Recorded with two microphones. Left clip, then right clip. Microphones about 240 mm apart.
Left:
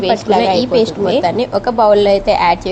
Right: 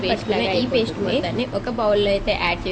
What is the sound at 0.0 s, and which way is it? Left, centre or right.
A woman's voice, left.